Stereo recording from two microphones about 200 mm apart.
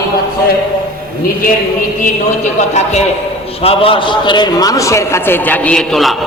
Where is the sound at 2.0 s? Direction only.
35° left (ahead or behind); by 6.1 s centre (ahead or behind).